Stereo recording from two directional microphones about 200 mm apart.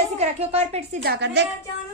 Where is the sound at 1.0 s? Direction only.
55° right (ahead or behind).